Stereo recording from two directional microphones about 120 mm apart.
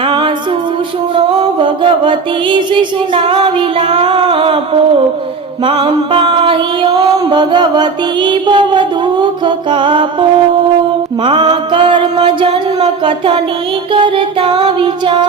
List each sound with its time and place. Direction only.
0.0 s a capella: 40° right (ahead or behind)
1.1 s music: 45° right (ahead or behind)